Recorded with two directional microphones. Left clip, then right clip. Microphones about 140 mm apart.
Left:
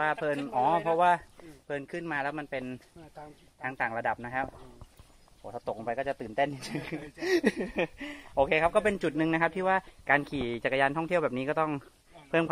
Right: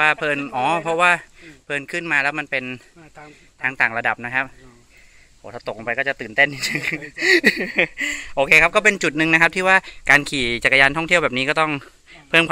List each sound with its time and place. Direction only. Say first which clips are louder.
0.0 s speech: right 11 dB; 20° right (ahead or behind)